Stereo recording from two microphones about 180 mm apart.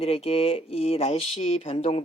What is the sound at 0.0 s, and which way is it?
Speech, 35° left (ahead or behind).